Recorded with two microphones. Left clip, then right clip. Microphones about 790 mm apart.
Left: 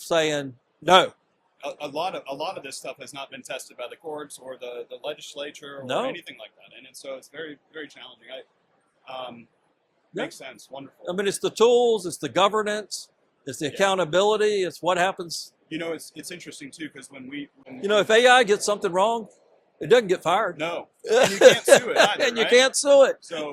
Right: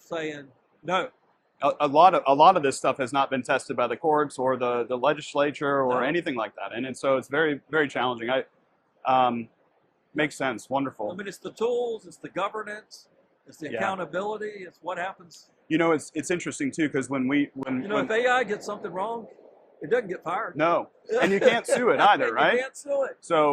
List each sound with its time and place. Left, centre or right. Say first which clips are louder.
0.1 s speech: left 10 dB; left
1.6 s speech: right 11 dB; right
11.2 s speech: left 13 dB; left
15.7 s speech: right 8 dB; right
17.8 s speech: left 8 dB; left
20.6 s speech: right 6 dB; right
21.0 s speech: left 8 dB; left
22.1 s speech: right 2 dB; right
22.5 s speech: left 11 dB; left